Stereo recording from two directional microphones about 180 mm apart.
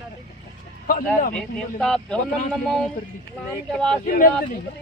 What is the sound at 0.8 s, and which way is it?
Speech, 50° left (ahead or behind).